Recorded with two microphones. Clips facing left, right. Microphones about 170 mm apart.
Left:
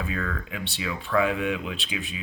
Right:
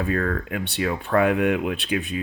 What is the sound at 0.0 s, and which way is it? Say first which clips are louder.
Speech: right 7 dB; 50° right (ahead or behind).